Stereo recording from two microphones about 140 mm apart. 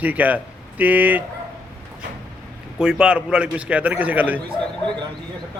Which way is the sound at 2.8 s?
5° right (ahead or behind).